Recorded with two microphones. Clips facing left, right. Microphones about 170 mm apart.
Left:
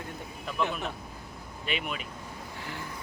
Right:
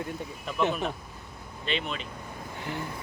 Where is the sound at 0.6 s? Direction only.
Centre (ahead or behind).